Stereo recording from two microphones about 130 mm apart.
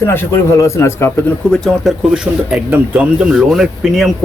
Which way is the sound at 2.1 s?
10° right (ahead or behind).